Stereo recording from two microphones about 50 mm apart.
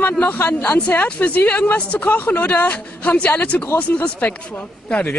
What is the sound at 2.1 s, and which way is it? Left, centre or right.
Speech, left.